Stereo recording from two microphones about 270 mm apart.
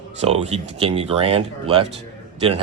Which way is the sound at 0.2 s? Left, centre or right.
Right.